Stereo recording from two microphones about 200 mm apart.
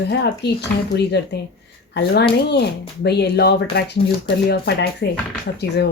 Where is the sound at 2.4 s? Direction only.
55° left (ahead or behind).